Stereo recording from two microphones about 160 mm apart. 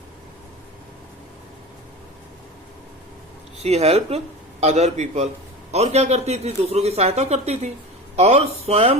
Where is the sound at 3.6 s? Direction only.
40° right (ahead or behind).